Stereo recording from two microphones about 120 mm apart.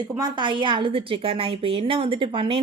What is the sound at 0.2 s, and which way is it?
A woman's voice, 40° right (ahead or behind).